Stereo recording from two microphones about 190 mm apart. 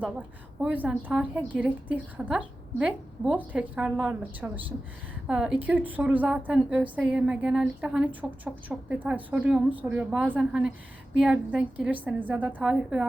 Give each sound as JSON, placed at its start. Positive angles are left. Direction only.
{"t": 0.2, "sound": "a woman's voice", "side_deg": -5}